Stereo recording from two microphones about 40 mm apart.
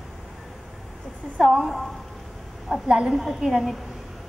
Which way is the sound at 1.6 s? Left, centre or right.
Centre.